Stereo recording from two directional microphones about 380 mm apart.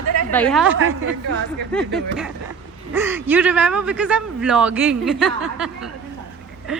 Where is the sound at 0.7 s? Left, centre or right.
Right.